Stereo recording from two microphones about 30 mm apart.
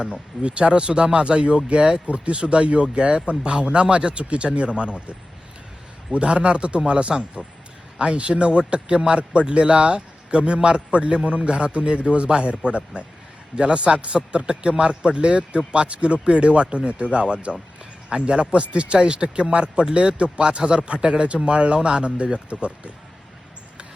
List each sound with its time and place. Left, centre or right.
0.4 s a man's voice: right
6.2 s a man's voice: right
7.4 s speech: centre
7.9 s a man's voice: right
9.3 s a man's voice: right